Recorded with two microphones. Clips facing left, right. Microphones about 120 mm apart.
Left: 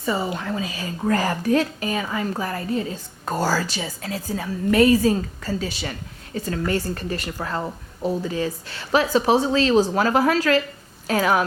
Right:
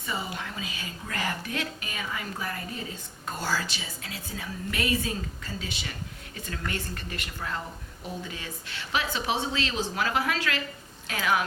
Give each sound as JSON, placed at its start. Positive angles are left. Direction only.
{"t": 0.0, "sound": "a woman's voice", "side_deg": 40}